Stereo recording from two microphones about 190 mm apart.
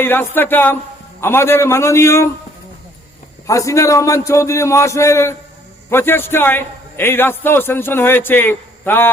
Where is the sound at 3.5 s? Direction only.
15° left (ahead or behind).